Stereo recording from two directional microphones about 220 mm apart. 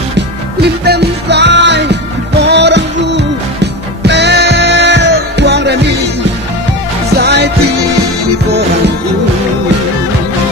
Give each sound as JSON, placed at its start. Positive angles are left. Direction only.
{"t": 0.6, "sound": "music", "side_deg": -50}
{"t": 7.2, "sound": "music", "side_deg": -50}